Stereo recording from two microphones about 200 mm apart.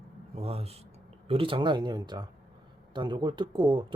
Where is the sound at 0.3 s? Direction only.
30° right (ahead or behind).